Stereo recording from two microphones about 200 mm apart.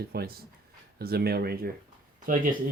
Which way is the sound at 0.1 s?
50° right (ahead or behind).